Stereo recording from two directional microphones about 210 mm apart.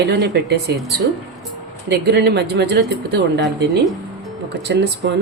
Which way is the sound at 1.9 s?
50° right (ahead or behind).